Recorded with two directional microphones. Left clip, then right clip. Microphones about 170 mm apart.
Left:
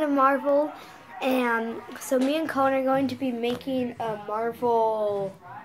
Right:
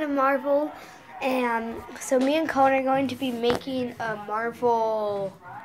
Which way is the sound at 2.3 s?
10° right (ahead or behind).